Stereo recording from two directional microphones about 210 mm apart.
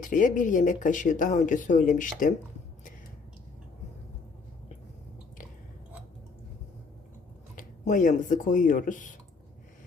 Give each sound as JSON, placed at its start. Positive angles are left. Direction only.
{"t": 0.0, "sound": "speech", "side_deg": 40}
{"t": 7.5, "sound": "speech", "side_deg": 40}